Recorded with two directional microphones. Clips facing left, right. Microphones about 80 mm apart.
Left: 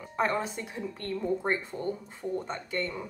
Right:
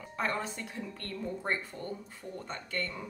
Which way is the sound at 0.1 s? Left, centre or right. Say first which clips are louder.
Left 5 dB; left.